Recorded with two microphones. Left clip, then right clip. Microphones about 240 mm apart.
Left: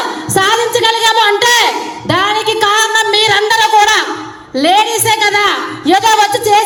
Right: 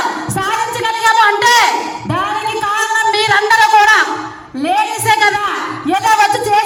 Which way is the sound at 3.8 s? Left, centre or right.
Left.